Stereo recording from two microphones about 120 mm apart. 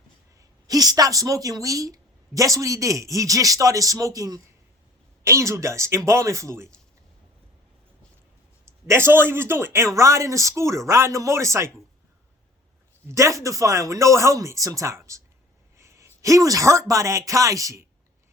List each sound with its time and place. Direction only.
0.3 s a woman's voice: 30° right (ahead or behind)
8.6 s a woman's voice: 20° right (ahead or behind)
13.1 s a woman's voice: 25° right (ahead or behind)